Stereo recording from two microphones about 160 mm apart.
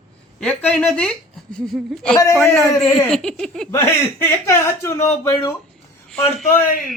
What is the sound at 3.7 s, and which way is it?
Speech, 15° left (ahead or behind).